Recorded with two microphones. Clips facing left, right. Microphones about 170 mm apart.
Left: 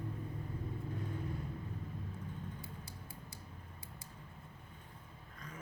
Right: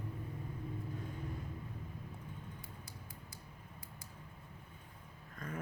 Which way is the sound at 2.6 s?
30° left (ahead or behind).